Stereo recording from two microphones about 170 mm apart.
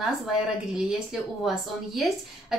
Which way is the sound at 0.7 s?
5° right (ahead or behind).